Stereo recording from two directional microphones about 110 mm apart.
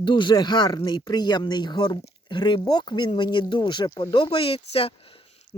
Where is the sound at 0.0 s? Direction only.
45° left (ahead or behind).